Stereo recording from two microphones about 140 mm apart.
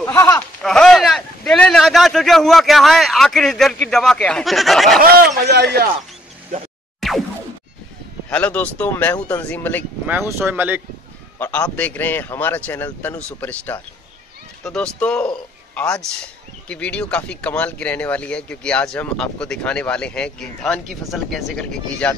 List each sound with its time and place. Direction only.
0.0 s a sound: 20° left (ahead or behind)
0.6 s speech: 5° left (ahead or behind)
7.0 s boing: centre (ahead or behind)
8.3 s speech: 10° left (ahead or behind)
10.0 s speech: 15° right (ahead or behind)
11.3 s a man's voice: 15° left (ahead or behind)